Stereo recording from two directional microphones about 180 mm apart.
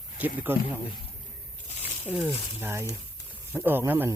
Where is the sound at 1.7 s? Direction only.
40° left (ahead or behind).